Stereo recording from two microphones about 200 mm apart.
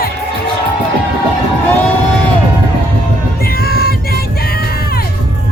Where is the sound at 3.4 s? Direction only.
50° left (ahead or behind).